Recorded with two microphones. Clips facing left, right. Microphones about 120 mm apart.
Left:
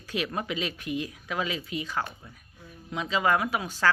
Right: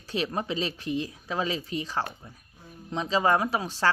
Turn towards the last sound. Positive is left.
turn(degrees=-30)  # may be behind; listen again after turning